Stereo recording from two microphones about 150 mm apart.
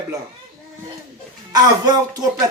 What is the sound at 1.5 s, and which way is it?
Speech, 25° right (ahead or behind).